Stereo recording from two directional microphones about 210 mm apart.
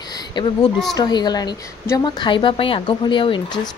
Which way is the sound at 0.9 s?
20° left (ahead or behind).